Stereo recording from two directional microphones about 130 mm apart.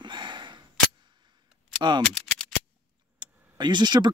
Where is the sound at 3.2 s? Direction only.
35° right (ahead or behind).